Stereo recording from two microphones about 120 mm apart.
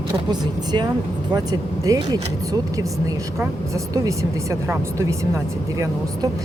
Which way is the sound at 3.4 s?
25° right (ahead or behind).